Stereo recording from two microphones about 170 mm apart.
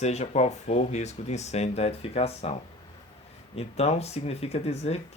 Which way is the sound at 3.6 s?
40° left (ahead or behind).